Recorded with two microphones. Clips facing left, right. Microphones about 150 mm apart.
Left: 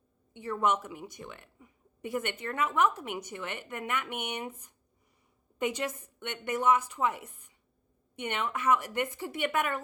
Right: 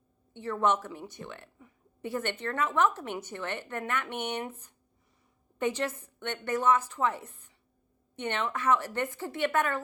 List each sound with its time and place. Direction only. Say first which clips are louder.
0.3 s a woman's voice: right 1 dB; 10° left (ahead or behind)